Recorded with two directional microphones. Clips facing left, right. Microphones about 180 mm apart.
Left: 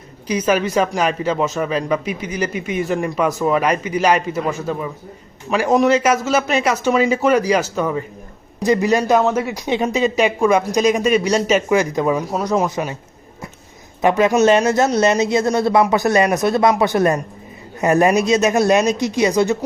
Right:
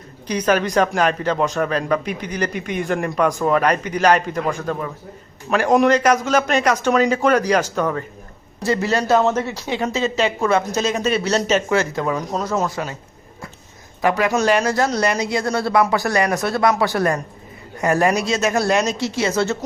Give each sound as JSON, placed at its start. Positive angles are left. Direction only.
{"t": 0.3, "sound": "speech", "side_deg": 10}
{"t": 14.0, "sound": "speech", "side_deg": 20}